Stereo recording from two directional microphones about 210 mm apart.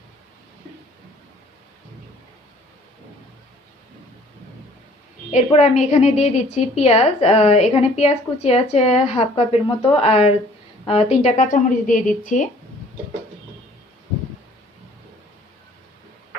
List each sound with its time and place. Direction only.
5.3 s a woman's voice: 30° left (ahead or behind)